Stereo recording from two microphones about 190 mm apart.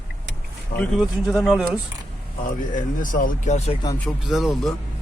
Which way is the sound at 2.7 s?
45° left (ahead or behind).